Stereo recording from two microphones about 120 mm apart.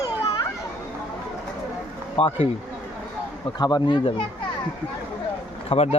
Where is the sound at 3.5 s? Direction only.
35° left (ahead or behind).